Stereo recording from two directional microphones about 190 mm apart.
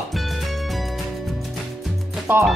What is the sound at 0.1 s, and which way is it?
Music, centre (ahead or behind).